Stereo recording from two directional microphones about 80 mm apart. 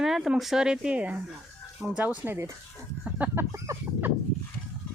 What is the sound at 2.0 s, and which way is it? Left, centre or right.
Chicken, right.